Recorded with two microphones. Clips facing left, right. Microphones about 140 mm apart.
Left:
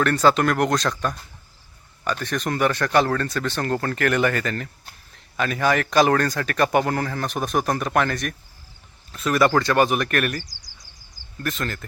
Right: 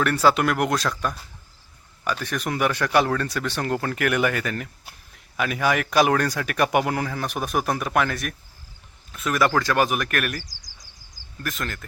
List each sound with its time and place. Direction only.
0.0 s speech: 10° right (ahead or behind)
10.4 s a sound: 90° right
11.4 s speech: centre (ahead or behind)